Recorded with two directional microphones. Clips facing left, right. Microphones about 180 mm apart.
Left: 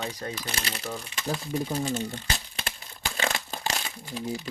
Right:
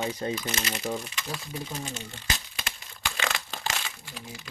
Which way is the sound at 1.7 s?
35° left (ahead or behind).